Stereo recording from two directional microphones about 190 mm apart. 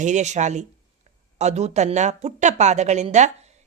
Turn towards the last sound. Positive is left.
turn(degrees=-40)  # may be behind; listen again after turning